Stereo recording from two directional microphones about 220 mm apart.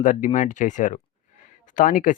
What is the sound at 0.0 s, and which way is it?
Speech, 35° left (ahead or behind).